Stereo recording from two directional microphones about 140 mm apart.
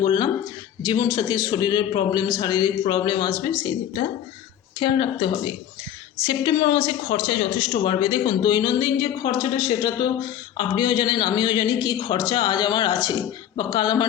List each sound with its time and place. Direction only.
0.0 s a man's voice: 35° left (ahead or behind)
4.8 s speech: 35° left (ahead or behind)